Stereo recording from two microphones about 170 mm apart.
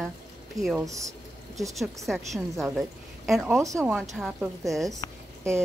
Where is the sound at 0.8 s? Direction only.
20° right (ahead or behind).